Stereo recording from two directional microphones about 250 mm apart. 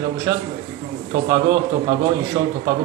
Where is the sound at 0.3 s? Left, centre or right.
Centre.